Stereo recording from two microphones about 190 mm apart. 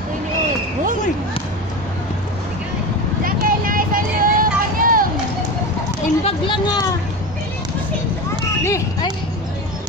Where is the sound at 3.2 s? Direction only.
50° right (ahead or behind).